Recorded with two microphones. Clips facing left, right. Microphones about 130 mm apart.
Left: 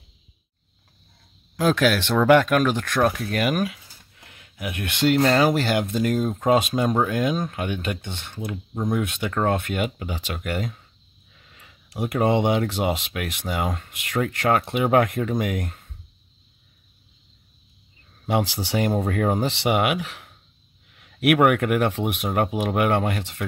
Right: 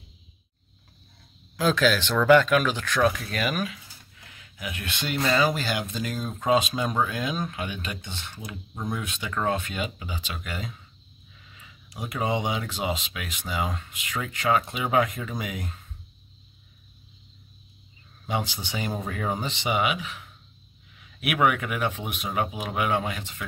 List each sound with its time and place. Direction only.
1.6 s speech: 55° left (ahead or behind)
18.2 s speech: 80° left; by 23.4 s 65° left (ahead or behind)